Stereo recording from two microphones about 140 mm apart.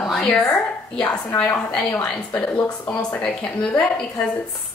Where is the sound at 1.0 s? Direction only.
20° left (ahead or behind).